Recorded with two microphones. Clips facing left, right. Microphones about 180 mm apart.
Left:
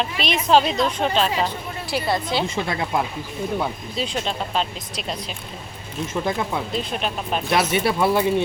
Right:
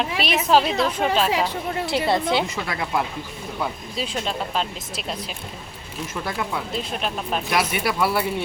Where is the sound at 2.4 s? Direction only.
25° left (ahead or behind).